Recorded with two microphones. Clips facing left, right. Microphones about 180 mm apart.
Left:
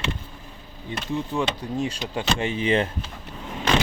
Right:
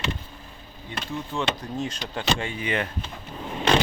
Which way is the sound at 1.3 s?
10° left (ahead or behind).